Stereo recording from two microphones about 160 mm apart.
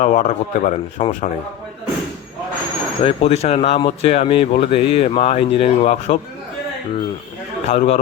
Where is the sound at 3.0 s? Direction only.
40° left (ahead or behind).